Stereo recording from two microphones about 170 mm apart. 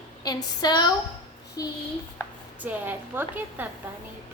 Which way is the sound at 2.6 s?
10° right (ahead or behind).